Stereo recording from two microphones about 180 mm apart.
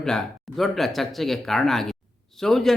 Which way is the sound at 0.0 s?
5° left (ahead or behind).